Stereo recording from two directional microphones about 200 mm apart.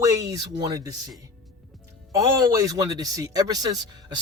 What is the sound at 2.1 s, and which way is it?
Speech, 15° right (ahead or behind).